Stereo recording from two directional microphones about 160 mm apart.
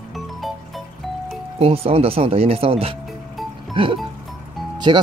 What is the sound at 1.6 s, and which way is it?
Speech, 35° right (ahead or behind).